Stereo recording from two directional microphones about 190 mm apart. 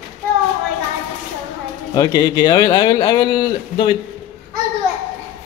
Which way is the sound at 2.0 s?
20° left (ahead or behind).